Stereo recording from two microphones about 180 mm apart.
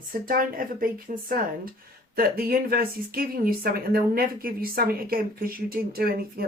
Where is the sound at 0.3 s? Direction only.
50° right (ahead or behind).